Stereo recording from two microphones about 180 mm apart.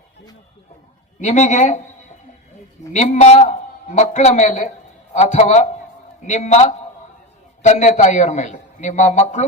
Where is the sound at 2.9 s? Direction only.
40° left (ahead or behind).